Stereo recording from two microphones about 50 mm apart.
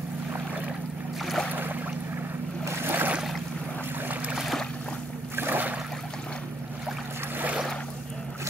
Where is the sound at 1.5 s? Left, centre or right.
Right.